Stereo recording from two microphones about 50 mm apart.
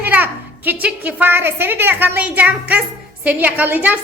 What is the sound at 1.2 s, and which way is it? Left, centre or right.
Speech, right.